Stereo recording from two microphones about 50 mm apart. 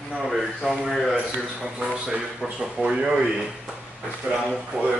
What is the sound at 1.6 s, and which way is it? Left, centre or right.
A man's voice, centre.